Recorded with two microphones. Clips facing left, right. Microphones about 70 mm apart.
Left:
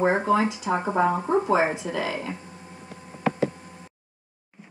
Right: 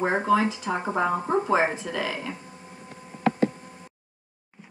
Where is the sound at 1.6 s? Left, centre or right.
Centre.